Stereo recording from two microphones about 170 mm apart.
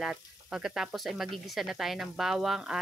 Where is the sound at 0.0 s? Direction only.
5° right (ahead or behind).